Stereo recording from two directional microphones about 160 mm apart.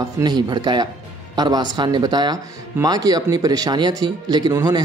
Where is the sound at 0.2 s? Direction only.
25° right (ahead or behind).